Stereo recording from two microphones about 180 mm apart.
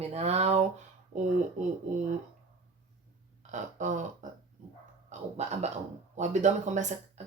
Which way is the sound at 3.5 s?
45° right (ahead or behind).